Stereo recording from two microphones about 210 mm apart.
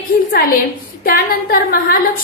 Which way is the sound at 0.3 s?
45° left (ahead or behind).